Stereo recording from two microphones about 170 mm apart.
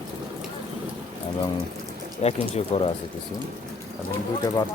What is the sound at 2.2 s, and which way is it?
Speech, 40° left (ahead or behind).